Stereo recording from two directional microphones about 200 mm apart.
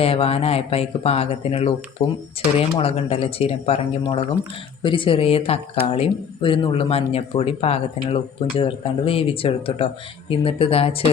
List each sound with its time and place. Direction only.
0.0 s speech: 30° left (ahead or behind)